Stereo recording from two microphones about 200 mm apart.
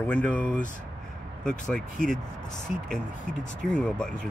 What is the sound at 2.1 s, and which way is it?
Speech, 40° left (ahead or behind).